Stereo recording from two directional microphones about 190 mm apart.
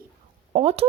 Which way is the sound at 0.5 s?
30° right (ahead or behind).